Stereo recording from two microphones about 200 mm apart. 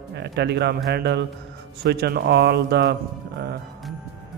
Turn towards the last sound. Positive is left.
turn(degrees=-55)  # may be behind; listen again after turning